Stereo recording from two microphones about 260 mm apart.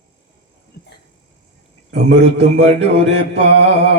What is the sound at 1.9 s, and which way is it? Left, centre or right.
Music, right.